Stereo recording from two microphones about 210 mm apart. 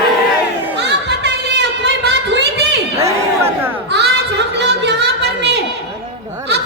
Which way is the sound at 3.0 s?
10° right (ahead or behind).